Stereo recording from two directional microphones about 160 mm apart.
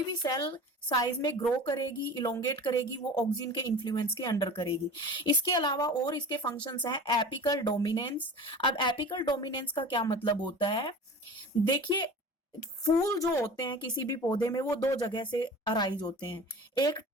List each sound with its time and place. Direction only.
0.2 s speech: 25° left (ahead or behind)
6.4 s speech: 10° left (ahead or behind)
6.8 s speech: 30° left (ahead or behind)
15.1 s speech: 30° left (ahead or behind)